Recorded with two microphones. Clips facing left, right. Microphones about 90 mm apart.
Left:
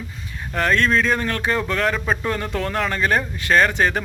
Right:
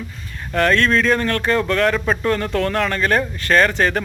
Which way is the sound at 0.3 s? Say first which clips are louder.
Right 3 dB; 10° left (ahead or behind).